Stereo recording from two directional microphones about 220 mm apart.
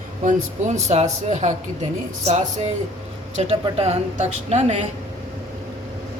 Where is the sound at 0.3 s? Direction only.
30° right (ahead or behind).